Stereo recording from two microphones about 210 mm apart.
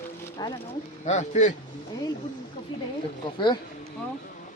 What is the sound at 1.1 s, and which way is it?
Speech, 35° left (ahead or behind).